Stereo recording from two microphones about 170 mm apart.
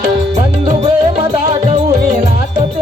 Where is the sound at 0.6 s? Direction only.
30° right (ahead or behind).